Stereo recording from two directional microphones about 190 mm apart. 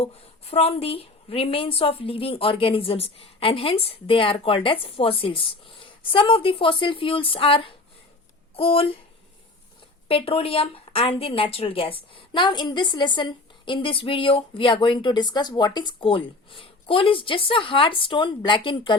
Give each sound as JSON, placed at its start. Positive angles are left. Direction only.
{"t": 0.0, "sound": "a woman's voice", "side_deg": 30}
{"t": 10.1, "sound": "a woman's voice", "side_deg": 30}